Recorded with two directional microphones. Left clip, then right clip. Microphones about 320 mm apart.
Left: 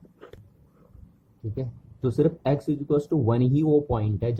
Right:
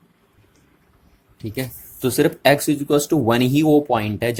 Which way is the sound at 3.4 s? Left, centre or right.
Centre.